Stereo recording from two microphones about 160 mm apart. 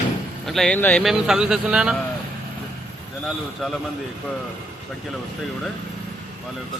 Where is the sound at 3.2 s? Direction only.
Centre (ahead or behind).